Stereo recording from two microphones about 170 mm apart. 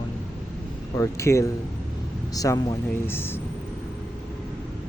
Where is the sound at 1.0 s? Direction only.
15° left (ahead or behind).